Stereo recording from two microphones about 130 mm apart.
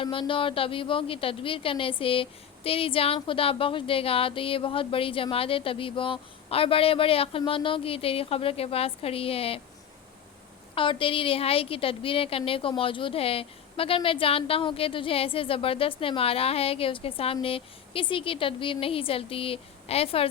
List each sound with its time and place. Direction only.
0.0 s speech: 40° left (ahead or behind)
10.8 s speech: 40° left (ahead or behind)